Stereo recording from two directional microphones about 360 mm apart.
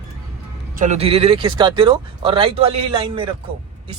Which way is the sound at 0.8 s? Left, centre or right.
Centre.